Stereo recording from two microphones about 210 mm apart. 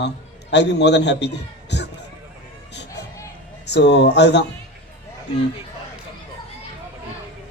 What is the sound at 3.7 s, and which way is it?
Speech, 55° left (ahead or behind).